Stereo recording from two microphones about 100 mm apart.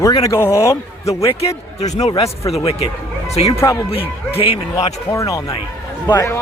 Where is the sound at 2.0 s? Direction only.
90° left.